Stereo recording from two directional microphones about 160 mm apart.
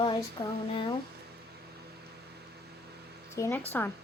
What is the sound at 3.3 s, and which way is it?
Speech, 15° left (ahead or behind).